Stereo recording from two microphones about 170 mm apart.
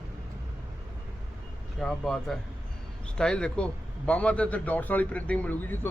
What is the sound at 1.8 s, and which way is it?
A man's voice, 5° left (ahead or behind).